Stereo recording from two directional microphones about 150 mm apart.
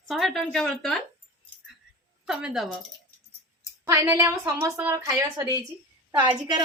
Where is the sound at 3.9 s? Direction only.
20° right (ahead or behind).